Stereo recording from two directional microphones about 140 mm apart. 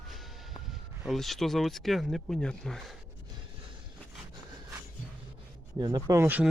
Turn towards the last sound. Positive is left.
turn(degrees=-10)  # may be behind; listen again after turning